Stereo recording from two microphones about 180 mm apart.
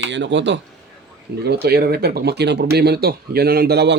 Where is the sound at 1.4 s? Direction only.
65° right (ahead or behind).